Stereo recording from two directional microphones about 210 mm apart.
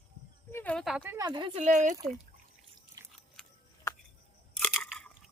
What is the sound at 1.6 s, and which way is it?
Speech, 35° right (ahead or behind).